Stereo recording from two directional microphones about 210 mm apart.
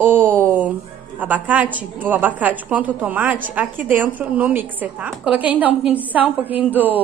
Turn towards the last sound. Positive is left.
turn(degrees=-10)  # may be behind; listen again after turning